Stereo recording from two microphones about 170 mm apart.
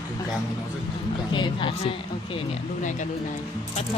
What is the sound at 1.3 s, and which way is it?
Speech, 30° left (ahead or behind).